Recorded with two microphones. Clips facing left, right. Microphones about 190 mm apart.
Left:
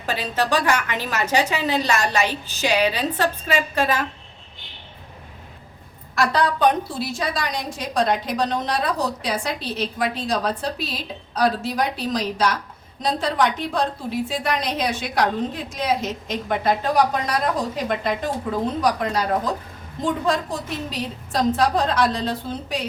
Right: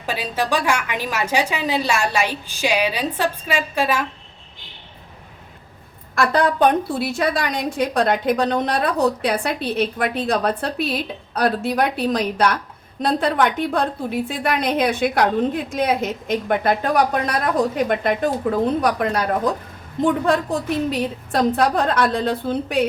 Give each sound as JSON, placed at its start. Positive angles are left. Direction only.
{"t": 0.0, "sound": "a woman's voice", "side_deg": -10}
{"t": 6.1, "sound": "a woman's voice", "side_deg": -50}
{"t": 20.2, "sound": "a woman's voice", "side_deg": -60}